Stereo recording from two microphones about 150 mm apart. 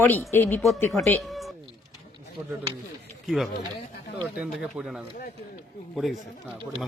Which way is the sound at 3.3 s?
Centre (ahead or behind).